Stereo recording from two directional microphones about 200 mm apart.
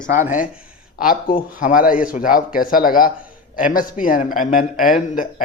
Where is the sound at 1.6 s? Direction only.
45° left (ahead or behind).